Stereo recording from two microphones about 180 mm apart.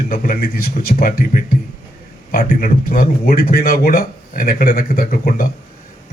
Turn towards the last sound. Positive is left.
turn(degrees=50)  # may be behind; listen again after turning